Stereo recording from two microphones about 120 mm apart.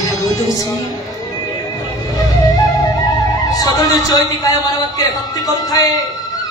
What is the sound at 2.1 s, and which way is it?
Music, 30° left (ahead or behind).